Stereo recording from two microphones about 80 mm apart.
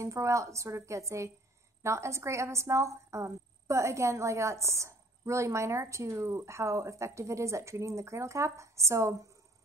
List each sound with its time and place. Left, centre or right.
0.0 s a woman's voice: right